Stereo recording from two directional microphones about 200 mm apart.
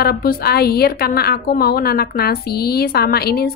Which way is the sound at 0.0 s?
50° left (ahead or behind).